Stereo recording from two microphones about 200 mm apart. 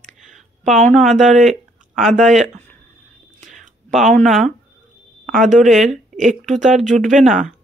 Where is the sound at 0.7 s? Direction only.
5° left (ahead or behind).